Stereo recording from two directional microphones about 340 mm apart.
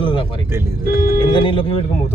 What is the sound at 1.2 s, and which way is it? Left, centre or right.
Speech, centre.